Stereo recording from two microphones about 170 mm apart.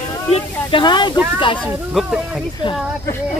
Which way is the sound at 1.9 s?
5° right (ahead or behind).